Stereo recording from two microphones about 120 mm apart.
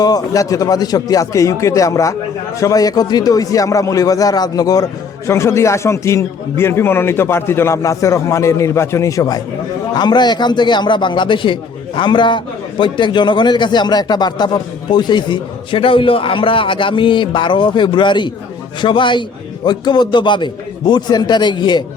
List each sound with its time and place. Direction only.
0.0 s a man's voice: 30° left (ahead or behind)